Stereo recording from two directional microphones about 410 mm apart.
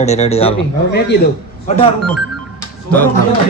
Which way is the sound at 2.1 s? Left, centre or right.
Centre.